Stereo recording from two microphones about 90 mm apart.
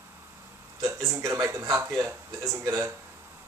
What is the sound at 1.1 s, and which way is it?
Speech, 35° right (ahead or behind).